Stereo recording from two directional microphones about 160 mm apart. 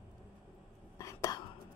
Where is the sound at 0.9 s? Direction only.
20° left (ahead or behind).